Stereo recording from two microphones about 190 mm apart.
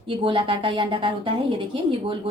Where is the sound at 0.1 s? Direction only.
25° right (ahead or behind).